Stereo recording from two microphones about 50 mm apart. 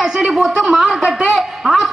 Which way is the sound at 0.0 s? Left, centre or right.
Centre.